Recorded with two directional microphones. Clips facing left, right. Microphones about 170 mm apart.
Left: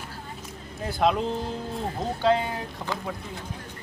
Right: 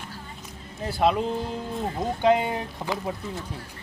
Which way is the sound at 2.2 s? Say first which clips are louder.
Right 2 dB; 15° right (ahead or behind).